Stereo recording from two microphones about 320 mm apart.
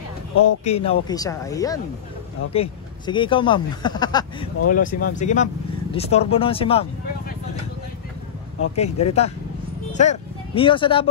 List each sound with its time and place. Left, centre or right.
0.7 s speech: centre
4.6 s speech: left
8.7 s speech: centre